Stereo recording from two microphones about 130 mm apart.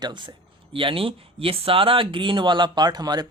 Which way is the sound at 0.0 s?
35° right (ahead or behind).